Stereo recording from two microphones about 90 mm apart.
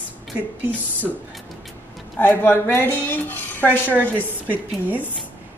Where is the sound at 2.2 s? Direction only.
20° left (ahead or behind).